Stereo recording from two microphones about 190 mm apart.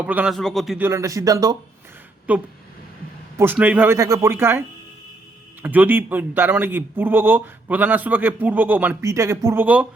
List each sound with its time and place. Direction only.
0.0 s a man's voice: 5° right (ahead or behind)
0.9 s a man's voice: 15° right (ahead or behind)
2.3 s a man's voice: 10° right (ahead or behind)
5.6 s a man's voice: 10° right (ahead or behind)